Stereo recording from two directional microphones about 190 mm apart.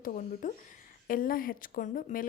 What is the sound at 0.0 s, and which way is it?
A woman's voice, 45° left (ahead or behind).